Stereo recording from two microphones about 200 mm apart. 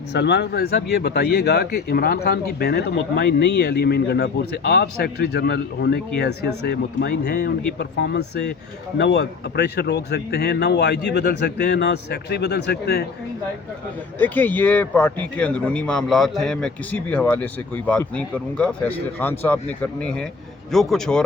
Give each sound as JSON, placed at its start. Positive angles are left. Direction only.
{"t": 0.1, "sound": "speech", "side_deg": 55}
{"t": 14.2, "sound": "a man's voice", "side_deg": 10}